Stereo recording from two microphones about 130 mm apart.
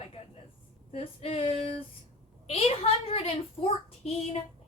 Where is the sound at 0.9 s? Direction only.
50° left (ahead or behind).